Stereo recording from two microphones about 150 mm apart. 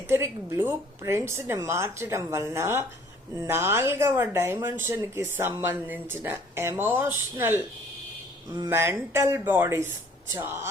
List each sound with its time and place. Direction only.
0.1 s speech: 15° right (ahead or behind)